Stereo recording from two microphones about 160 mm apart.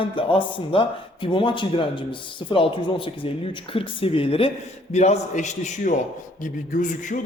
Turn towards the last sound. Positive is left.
turn(degrees=55)  # may be behind; listen again after turning